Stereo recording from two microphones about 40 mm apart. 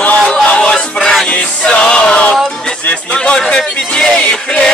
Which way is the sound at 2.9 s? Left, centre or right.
Left.